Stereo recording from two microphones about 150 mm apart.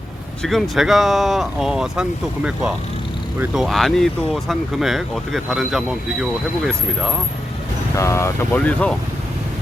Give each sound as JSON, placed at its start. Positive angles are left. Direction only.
{"t": 0.4, "sound": "speech", "side_deg": 0}
{"t": 7.9, "sound": "speech", "side_deg": 20}
{"t": 8.5, "sound": "speech", "side_deg": 10}